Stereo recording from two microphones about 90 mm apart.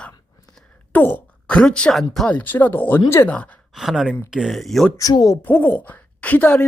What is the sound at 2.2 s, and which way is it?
A woman's voice, 20° left (ahead or behind).